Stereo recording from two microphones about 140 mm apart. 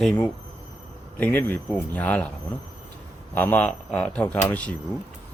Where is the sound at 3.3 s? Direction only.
10° left (ahead or behind).